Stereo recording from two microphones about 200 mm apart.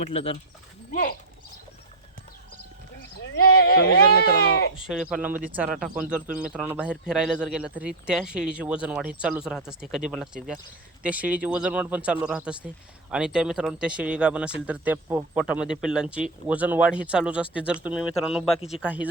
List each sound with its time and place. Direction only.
0.0 s speech: 30° left (ahead or behind)
3.2 s a sound: 50° left (ahead or behind)
4.9 s speech: 5° right (ahead or behind)